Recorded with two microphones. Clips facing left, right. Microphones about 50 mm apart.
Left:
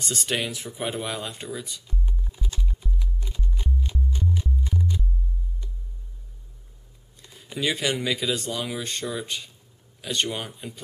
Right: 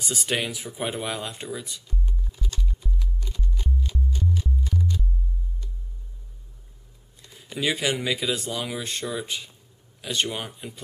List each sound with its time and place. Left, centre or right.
0.0 s speech: centre
2.0 s music: centre
7.2 s speech: centre